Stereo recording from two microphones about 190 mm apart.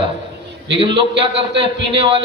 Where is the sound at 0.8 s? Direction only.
30° right (ahead or behind).